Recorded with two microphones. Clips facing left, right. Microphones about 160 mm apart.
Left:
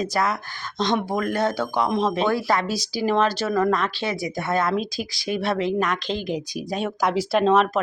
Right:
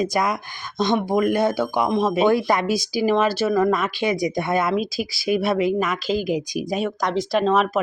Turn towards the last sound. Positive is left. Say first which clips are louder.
# even
turn(degrees=0)  # may be behind; listen again after turning